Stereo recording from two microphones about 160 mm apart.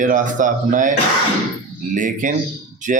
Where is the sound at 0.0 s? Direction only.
55° right (ahead or behind).